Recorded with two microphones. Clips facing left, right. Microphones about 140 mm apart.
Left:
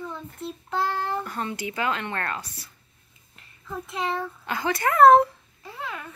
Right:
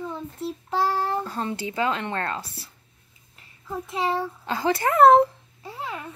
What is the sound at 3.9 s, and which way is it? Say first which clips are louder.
Speech: right 3 dB; 30° right (ahead or behind).